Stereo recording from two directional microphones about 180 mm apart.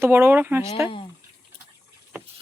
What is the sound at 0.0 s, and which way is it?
Speech, 10° right (ahead or behind).